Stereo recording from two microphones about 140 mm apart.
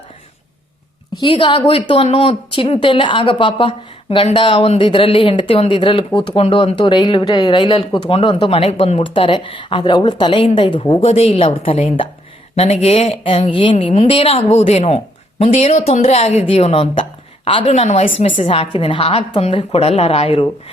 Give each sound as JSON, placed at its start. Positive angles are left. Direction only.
{"t": 1.1, "sound": "a woman's voice", "side_deg": 35}
{"t": 17.7, "sound": "a woman's voice", "side_deg": 55}
{"t": 18.0, "sound": "speech", "side_deg": 40}